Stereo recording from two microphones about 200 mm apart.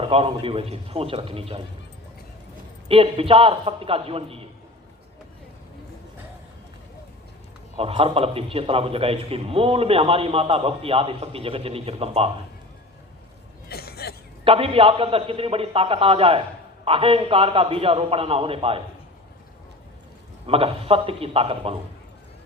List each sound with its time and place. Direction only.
0.0 s a man's voice: 30° right (ahead or behind)
2.9 s a man's voice: 30° right (ahead or behind)
7.8 s a man's voice: 30° right (ahead or behind)
13.7 s cough: 50° left (ahead or behind)
14.4 s a man's voice: 30° right (ahead or behind)
20.5 s a man's voice: 30° right (ahead or behind)